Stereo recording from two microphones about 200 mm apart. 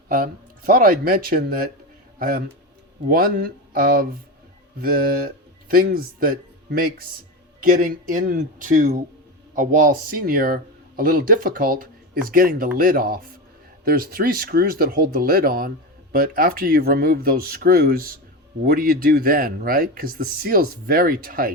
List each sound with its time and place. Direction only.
0.1 s speech: 45° right (ahead or behind)